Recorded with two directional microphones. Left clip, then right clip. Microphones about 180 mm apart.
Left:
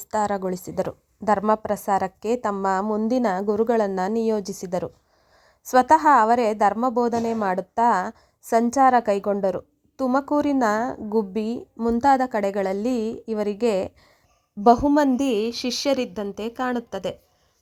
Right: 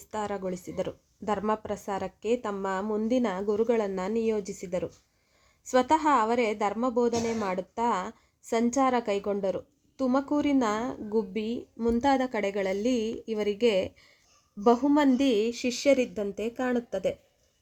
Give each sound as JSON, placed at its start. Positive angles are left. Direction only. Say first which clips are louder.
{"t": 0.3, "sound": "a woman's voice", "louder": "left 6 dB", "side_deg": 30}
{"t": 15.4, "sound": "speech", "louder": "left 3 dB", "side_deg": 10}